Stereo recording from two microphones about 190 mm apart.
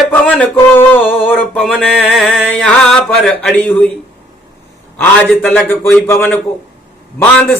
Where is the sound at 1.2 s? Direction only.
Centre (ahead or behind).